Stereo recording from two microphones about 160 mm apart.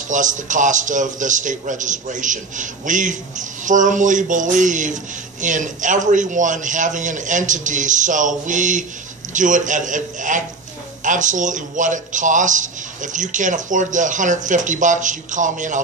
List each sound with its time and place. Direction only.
0.1 s a man's voice: 50° right (ahead or behind)